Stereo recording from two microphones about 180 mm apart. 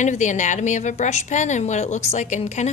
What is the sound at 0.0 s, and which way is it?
A woman's voice, 45° left (ahead or behind).